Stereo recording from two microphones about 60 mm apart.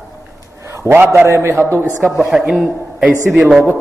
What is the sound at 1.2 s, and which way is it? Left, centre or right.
Speech, right.